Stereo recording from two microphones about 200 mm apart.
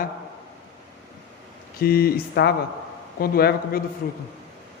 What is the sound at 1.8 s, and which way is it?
A man's voice, 50° left (ahead or behind).